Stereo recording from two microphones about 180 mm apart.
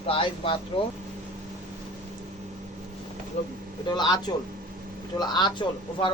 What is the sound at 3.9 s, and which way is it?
Speech, 25° left (ahead or behind).